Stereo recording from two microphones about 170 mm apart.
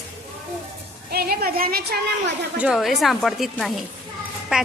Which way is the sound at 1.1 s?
65° right (ahead or behind).